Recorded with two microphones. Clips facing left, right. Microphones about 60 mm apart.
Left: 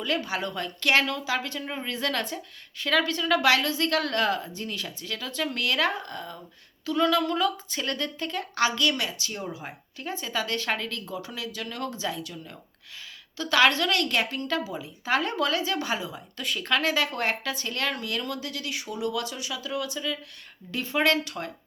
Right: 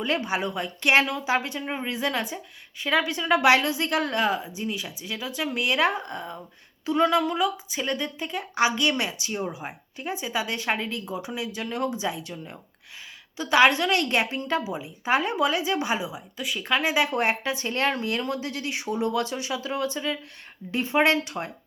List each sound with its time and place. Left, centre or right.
0.0 s a woman's voice: right